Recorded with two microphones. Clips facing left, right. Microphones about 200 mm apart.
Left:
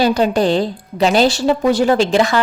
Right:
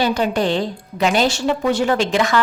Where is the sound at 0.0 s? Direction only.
35° left (ahead or behind).